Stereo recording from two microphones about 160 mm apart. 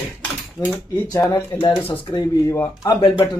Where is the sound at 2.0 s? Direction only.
25° left (ahead or behind).